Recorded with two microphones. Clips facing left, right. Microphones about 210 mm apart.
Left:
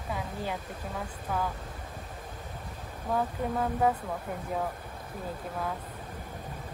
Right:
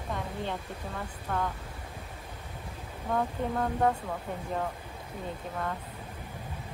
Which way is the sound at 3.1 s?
Centre (ahead or behind).